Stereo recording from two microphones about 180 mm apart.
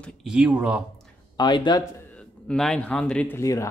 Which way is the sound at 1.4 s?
25° left (ahead or behind).